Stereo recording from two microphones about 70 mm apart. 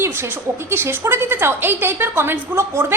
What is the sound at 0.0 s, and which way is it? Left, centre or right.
A woman's voice, right.